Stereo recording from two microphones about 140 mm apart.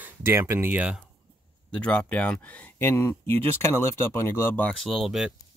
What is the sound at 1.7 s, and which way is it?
Speech, 10° left (ahead or behind).